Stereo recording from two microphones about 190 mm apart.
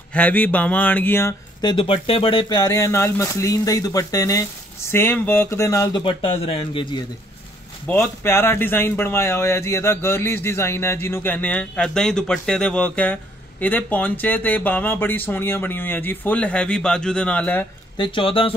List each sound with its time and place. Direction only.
0.1 s speech: 10° left (ahead or behind); by 6.9 s 30° left (ahead or behind)
7.8 s speech: 10° left (ahead or behind)
17.9 s speech: 25° left (ahead or behind)